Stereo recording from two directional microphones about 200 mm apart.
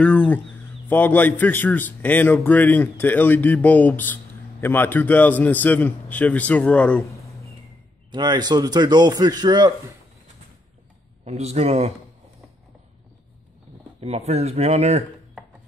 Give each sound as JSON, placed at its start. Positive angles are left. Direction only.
{"t": 0.0, "sound": "a man's voice", "side_deg": 5}
{"t": 8.1, "sound": "a man's voice", "side_deg": -20}
{"t": 11.2, "sound": "speech", "side_deg": -35}
{"t": 14.0, "sound": "speech", "side_deg": -30}